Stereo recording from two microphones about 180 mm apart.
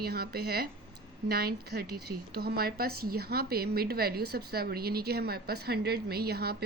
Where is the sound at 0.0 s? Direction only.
60° right (ahead or behind).